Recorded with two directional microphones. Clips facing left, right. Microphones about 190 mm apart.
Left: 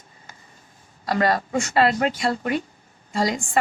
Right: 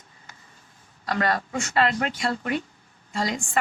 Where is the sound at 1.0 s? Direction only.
35° left (ahead or behind).